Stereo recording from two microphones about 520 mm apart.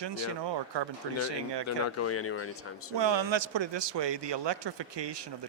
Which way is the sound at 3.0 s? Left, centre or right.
Right.